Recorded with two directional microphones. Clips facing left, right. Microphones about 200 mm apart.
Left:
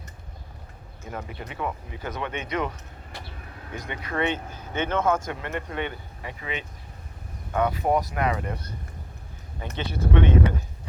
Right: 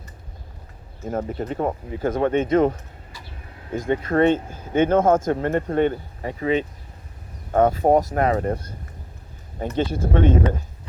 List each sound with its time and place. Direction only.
1.1 s speech: 45° right (ahead or behind)
3.8 s speech: 45° right (ahead or behind)
9.6 s speech: 45° right (ahead or behind)